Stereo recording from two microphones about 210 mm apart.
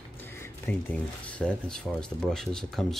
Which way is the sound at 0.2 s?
10° left (ahead or behind).